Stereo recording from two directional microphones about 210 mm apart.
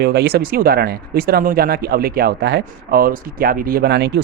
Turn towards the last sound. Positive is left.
turn(degrees=-50)  # may be behind; listen again after turning